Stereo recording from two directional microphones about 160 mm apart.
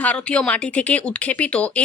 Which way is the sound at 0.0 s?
10° left (ahead or behind).